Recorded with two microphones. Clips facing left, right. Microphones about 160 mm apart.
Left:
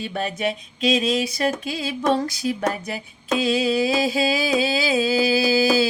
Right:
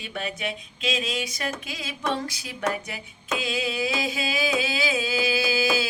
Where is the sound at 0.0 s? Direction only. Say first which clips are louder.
Left 7 dB; 40° left (ahead or behind).